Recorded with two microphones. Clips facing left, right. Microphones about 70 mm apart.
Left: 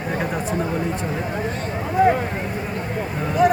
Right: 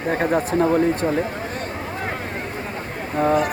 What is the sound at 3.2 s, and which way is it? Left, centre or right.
Speech, right.